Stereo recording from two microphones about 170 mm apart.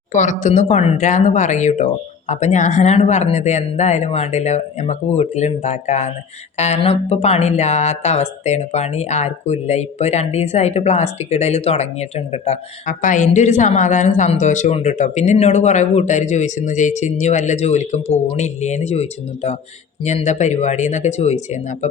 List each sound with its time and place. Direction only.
0.1 s speech: 45° left (ahead or behind)